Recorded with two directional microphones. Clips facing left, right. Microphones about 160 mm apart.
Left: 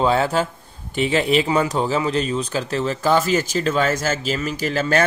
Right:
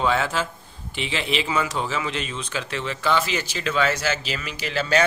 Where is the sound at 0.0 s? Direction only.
35° left (ahead or behind).